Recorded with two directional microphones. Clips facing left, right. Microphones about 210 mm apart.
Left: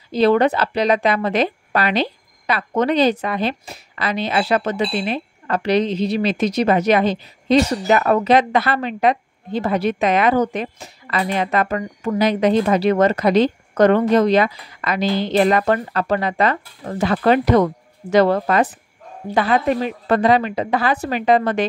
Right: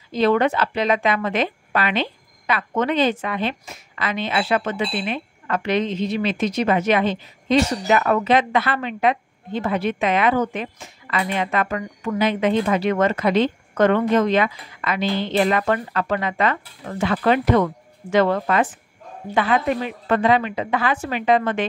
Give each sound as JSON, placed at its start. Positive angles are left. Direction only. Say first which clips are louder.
{"t": 0.1, "sound": "a woman's voice", "louder": "left 3 dB", "side_deg": 35}